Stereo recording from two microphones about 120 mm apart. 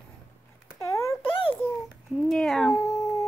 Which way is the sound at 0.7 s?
25° left (ahead or behind).